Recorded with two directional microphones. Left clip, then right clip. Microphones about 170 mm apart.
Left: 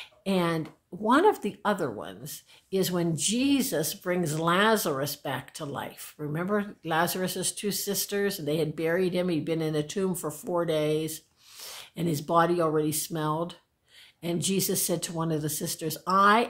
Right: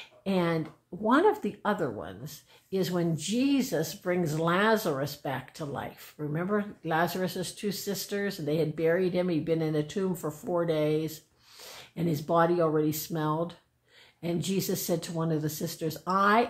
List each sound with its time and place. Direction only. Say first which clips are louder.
0.2 s speech: left 1 dB; 15° left (ahead or behind)